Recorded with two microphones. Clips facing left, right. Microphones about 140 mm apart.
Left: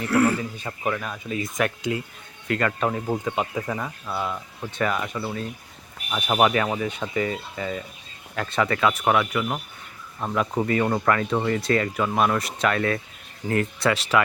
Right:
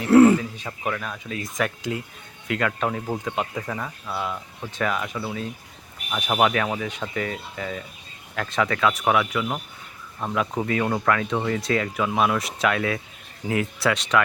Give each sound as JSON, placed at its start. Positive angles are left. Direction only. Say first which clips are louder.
{"t": 0.1, "sound": "speech", "louder": "right 8 dB", "side_deg": -25}
{"t": 0.3, "sound": "speech", "louder": "right 2 dB", "side_deg": 0}